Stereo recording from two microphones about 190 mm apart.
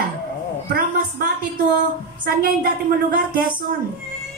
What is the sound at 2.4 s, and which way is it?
Speech, 50° right (ahead or behind).